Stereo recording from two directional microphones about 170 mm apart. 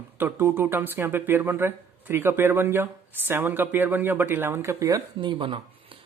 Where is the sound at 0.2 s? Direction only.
10° right (ahead or behind).